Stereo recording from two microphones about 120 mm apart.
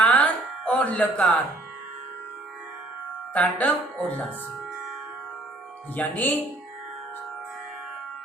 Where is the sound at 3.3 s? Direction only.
10° left (ahead or behind).